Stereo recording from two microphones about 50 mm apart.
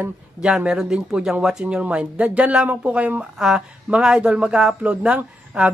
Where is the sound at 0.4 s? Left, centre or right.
Centre.